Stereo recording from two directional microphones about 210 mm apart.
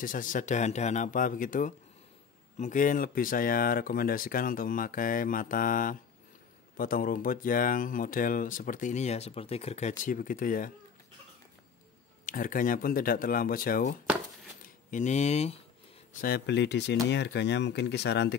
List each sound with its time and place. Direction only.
0.0 s speech: 40° left (ahead or behind)
12.3 s speech: 40° left (ahead or behind)
16.1 s speech: 45° left (ahead or behind)